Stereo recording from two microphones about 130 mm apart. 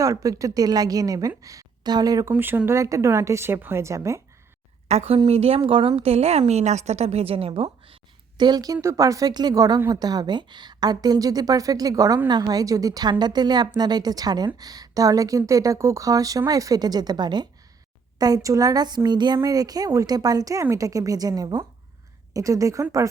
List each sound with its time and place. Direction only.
0.0 s a woman's voice: 25° right (ahead or behind)
2.3 s a woman's voice: 15° right (ahead or behind)
4.9 s a woman's voice: 50° right (ahead or behind)
8.4 s a woman's voice: 30° right (ahead or behind)